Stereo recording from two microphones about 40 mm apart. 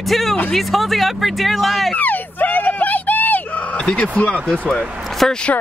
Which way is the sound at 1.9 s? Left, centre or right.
Left.